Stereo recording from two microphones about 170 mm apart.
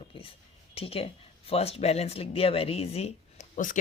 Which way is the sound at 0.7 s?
35° left (ahead or behind).